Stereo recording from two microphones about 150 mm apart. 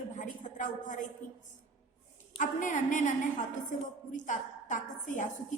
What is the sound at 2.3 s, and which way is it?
A woman's voice, 60° left (ahead or behind).